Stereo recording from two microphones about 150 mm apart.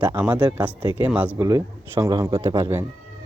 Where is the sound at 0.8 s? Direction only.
25° right (ahead or behind).